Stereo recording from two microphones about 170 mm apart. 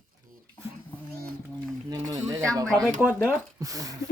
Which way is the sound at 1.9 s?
20° right (ahead or behind).